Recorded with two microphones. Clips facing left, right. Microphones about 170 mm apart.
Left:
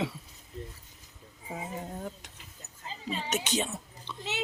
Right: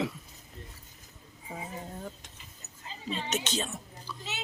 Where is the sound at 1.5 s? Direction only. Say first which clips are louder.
Left 2 dB; 10° left (ahead or behind).